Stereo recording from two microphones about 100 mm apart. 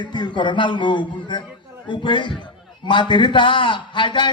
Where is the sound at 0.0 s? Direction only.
50° left (ahead or behind).